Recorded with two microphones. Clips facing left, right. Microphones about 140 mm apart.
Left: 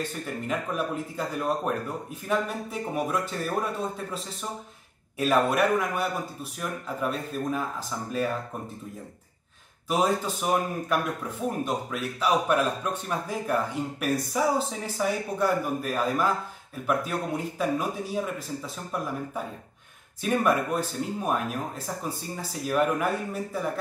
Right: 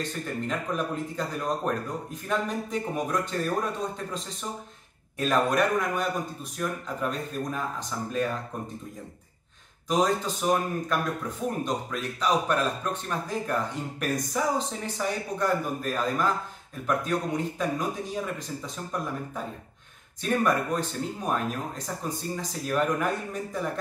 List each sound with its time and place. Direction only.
0.0 s speech: 10° left (ahead or behind)
5.2 s speech: 5° left (ahead or behind)
9.8 s speech: 10° left (ahead or behind)
20.2 s speech: 10° left (ahead or behind)